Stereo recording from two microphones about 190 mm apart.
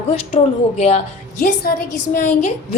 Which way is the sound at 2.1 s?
40° left (ahead or behind).